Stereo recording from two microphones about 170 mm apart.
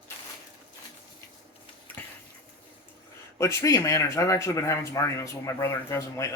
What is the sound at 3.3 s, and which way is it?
Speech, 20° left (ahead or behind).